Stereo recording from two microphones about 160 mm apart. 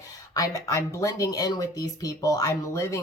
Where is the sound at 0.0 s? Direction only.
20° left (ahead or behind).